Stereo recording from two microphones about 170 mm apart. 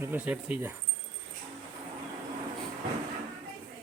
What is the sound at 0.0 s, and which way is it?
Speech, 10° right (ahead or behind).